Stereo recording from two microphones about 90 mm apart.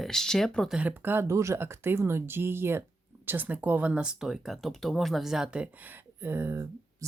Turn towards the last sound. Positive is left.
turn(degrees=-30)  # may be behind; listen again after turning